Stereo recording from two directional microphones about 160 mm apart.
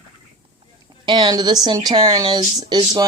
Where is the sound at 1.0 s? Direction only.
25° right (ahead or behind).